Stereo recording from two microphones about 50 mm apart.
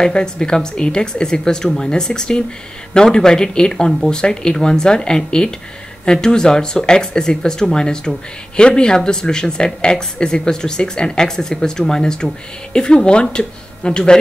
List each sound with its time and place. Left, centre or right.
0.0 s speech: centre